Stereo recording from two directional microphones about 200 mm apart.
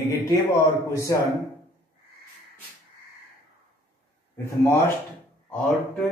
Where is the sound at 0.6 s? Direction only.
15° left (ahead or behind).